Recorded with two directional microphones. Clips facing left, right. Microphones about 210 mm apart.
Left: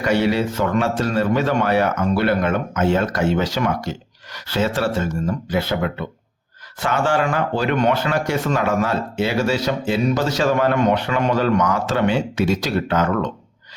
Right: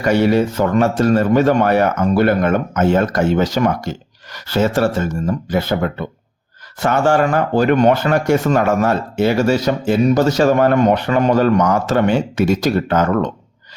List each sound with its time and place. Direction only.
0.0 s speech: 45° right (ahead or behind)